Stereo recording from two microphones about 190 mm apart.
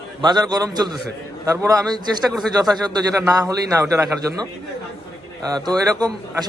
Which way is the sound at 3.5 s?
15° right (ahead or behind).